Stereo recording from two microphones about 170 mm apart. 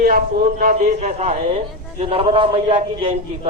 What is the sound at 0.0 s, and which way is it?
A man's voice, 60° right (ahead or behind).